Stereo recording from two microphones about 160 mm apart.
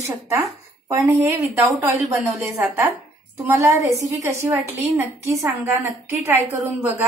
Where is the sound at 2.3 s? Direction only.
5° right (ahead or behind).